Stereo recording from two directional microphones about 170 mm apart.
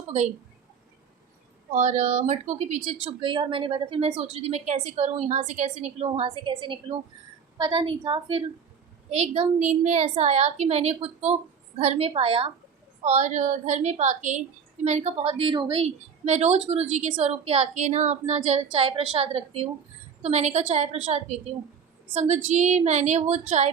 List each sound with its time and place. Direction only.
1.7 s a woman's voice: 45° right (ahead or behind)